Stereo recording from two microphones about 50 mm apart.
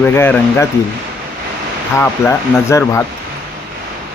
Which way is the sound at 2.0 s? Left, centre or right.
Left.